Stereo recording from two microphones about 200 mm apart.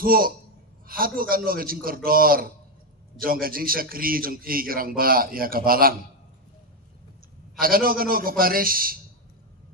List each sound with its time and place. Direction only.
0.0 s a man's voice: 45° right (ahead or behind)
7.6 s a man's voice: 45° right (ahead or behind)